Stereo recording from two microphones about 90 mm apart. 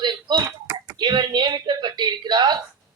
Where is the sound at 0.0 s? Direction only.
55° right (ahead or behind).